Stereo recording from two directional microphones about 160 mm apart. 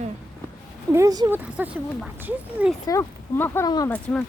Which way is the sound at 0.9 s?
20° right (ahead or behind).